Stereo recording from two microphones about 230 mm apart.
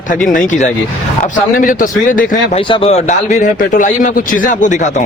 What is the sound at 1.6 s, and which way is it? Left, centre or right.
Speech, left.